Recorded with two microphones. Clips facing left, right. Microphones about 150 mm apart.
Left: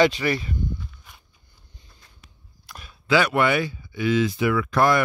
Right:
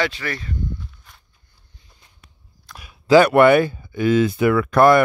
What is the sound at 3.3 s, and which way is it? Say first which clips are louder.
Speech: right 9 dB; 55° right (ahead or behind).